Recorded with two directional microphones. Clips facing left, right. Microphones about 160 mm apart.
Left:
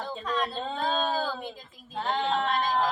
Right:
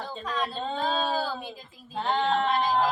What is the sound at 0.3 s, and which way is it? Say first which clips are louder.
A woman's voice: even; 5° right (ahead or behind).